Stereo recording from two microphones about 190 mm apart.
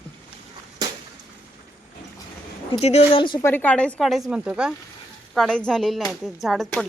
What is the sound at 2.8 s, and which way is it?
Speech, 35° left (ahead or behind).